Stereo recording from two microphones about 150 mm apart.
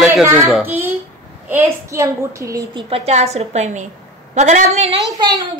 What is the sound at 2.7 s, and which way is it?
A woman's voice, 40° right (ahead or behind).